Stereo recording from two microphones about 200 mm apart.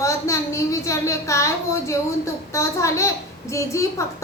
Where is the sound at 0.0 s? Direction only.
15° left (ahead or behind).